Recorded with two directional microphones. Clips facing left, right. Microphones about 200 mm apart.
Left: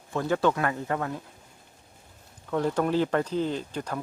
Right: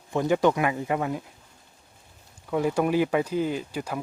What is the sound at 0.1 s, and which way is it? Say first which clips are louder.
Speech: right 3 dB; 15° right (ahead or behind).